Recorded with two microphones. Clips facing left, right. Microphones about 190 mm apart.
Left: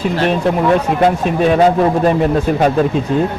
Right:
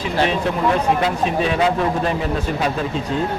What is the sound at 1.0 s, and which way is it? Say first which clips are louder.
Speech: left 6 dB; 50° left (ahead or behind).